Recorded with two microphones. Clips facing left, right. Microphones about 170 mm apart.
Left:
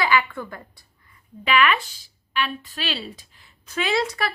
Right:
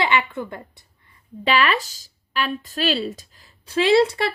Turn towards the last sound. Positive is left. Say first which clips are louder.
# right 7 dB
turn(degrees=-30)  # may be behind; listen again after turning